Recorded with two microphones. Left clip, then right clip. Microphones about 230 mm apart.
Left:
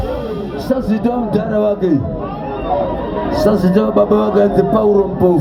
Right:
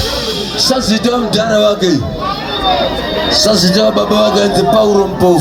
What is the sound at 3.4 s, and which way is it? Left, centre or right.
Speech, right.